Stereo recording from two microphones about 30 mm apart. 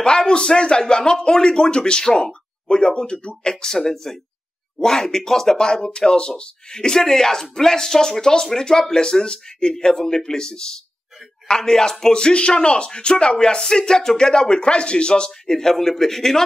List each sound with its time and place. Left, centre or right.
0.0 s speech: left
3.6 s speech: centre
5.9 s speech: left; by 12.1 s centre
12.1 s speech: left; by 16.4 s centre